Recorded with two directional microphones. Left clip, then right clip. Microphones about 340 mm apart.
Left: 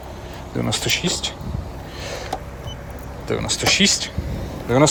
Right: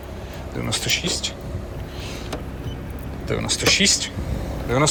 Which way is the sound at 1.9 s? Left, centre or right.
Left.